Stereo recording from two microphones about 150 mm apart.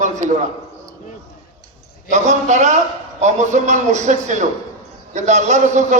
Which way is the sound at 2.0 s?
50° right (ahead or behind).